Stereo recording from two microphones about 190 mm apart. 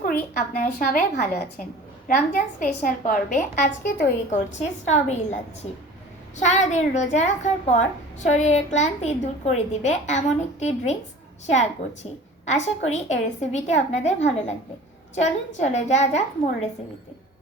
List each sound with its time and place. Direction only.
0.0 s a woman's voice: 50° left (ahead or behind)
6.4 s a woman's voice: 40° left (ahead or behind)
12.5 s a woman's voice: 35° left (ahead or behind)